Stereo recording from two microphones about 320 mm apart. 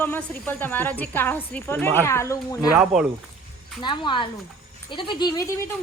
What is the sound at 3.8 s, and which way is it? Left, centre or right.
A woman's voice, centre.